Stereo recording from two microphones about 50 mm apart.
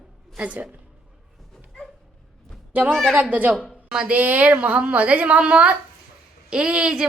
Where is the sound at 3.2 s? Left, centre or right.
Right.